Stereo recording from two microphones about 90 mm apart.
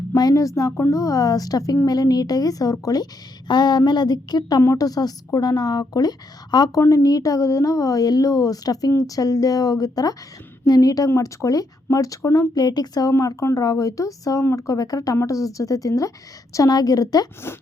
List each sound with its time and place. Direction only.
0.1 s a woman's voice: 40° left (ahead or behind)
3.5 s a woman's voice: 55° left (ahead or behind)